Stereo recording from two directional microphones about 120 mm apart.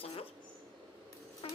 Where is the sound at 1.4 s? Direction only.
50° left (ahead or behind).